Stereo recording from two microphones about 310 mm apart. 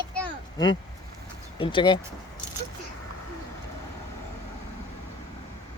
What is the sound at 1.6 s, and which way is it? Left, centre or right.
Speech, centre.